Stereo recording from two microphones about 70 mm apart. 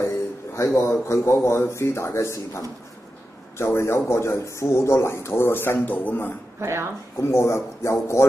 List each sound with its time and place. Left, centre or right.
0.0 s a man's voice: left
6.6 s speech: right
7.2 s speech: left